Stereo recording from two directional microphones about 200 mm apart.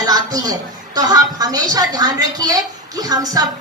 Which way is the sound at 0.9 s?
20° right (ahead or behind).